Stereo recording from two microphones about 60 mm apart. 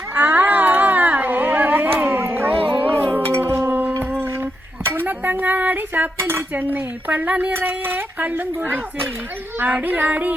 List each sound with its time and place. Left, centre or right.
0.1 s a sound: right
2.0 s music: right
3.2 s a sound: right
6.5 s speech: right
7.5 s speech: right
9.8 s speech: right